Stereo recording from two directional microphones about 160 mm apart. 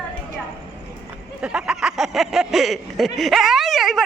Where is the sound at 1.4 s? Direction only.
5° right (ahead or behind).